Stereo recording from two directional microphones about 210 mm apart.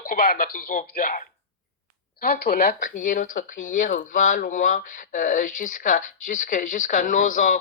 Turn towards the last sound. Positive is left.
turn(degrees=35)  # may be behind; listen again after turning